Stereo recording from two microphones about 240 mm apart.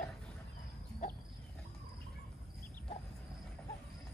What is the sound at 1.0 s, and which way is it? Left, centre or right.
Wild animals, left.